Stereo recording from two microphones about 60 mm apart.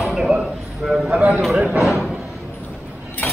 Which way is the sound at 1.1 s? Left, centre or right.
Right.